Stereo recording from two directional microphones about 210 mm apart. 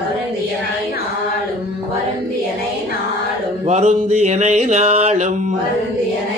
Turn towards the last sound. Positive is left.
turn(degrees=-30)  # may be behind; listen again after turning